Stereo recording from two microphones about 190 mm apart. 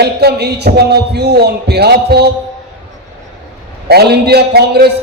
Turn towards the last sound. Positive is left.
turn(degrees=-60)  # may be behind; listen again after turning